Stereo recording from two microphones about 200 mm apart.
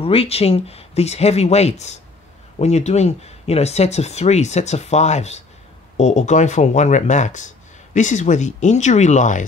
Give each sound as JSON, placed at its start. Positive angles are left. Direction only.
{"t": 0.0, "sound": "speech", "side_deg": 30}